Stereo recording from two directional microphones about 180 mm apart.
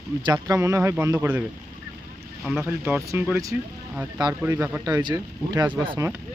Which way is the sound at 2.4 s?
Centre (ahead or behind).